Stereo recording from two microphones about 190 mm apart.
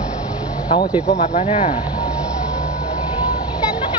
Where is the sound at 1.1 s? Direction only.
35° left (ahead or behind).